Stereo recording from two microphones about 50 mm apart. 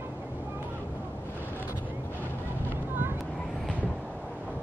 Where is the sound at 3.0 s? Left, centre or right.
Right.